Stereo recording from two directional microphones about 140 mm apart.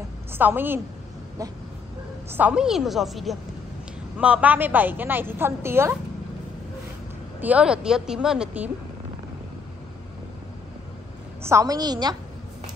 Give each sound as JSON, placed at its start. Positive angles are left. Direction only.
{"t": 0.3, "sound": "a woman's voice", "side_deg": -15}
{"t": 2.3, "sound": "a woman's voice", "side_deg": -10}
{"t": 7.3, "sound": "a woman's voice", "side_deg": -10}
{"t": 11.4, "sound": "a woman's voice", "side_deg": -25}